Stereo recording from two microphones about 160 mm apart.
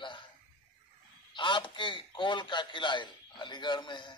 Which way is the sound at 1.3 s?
30° left (ahead or behind).